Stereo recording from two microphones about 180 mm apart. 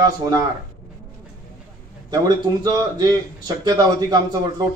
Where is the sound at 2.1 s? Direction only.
20° right (ahead or behind).